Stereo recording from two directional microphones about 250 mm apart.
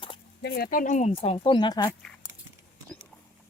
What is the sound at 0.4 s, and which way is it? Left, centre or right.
Speech, left.